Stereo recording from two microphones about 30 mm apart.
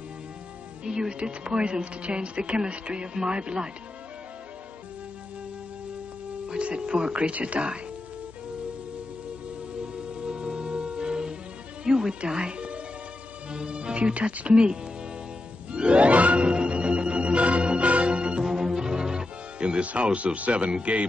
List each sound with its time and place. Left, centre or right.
0.8 s speech: right
6.6 s speech: right
7.3 s music: right
9.9 s music: right
11.8 s speech: right
12.3 s music: right
13.5 s speech: right
15.7 s speech: right
16.1 s music: right
16.4 s music: right
18.4 s music: centre; by 19.9 s right
20.3 s music: right